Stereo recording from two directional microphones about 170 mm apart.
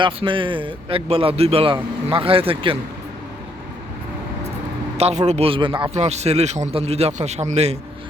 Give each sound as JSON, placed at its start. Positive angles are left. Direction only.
{"t": 0.0, "sound": "a man's voice", "side_deg": -30}
{"t": 4.9, "sound": "a man's voice", "side_deg": -40}
{"t": 6.0, "sound": "a man's voice", "side_deg": -40}